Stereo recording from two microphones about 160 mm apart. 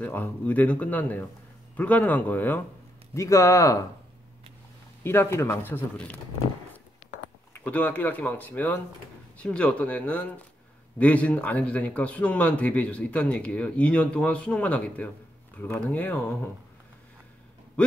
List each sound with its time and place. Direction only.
0.0 s speech: 10° left (ahead or behind)
5.0 s speech: 15° left (ahead or behind)
7.5 s speech: 10° left (ahead or behind)